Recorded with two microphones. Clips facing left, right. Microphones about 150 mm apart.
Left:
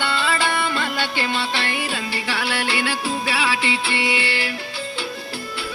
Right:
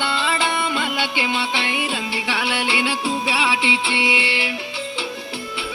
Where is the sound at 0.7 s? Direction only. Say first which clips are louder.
Right 1 dB; 15° right (ahead or behind).